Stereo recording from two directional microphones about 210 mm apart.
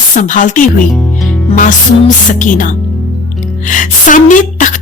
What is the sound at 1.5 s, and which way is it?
A woman's voice, 40° left (ahead or behind).